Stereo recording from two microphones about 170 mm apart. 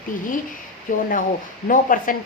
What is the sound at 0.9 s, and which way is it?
A woman's voice, 50° left (ahead or behind).